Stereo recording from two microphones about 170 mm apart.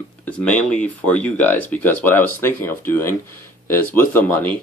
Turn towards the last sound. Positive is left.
turn(degrees=10)  # may be behind; listen again after turning